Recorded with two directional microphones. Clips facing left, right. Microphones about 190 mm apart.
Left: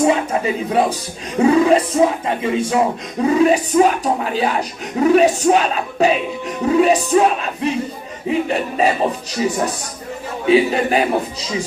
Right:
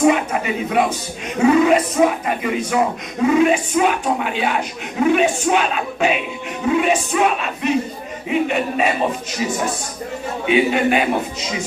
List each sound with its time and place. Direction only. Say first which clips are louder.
0.0 s speech: even; 30° left (ahead or behind)